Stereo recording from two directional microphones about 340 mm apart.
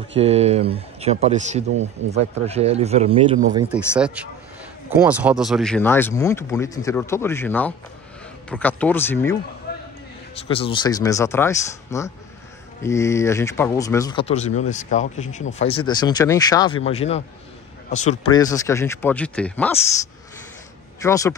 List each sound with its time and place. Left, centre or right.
0.1 s a man's voice: centre
3.5 s speech: centre
9.7 s a sound: left
10.3 s speech: centre
21.0 s speech: centre